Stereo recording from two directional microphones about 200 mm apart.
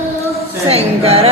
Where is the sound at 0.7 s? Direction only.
30° right (ahead or behind).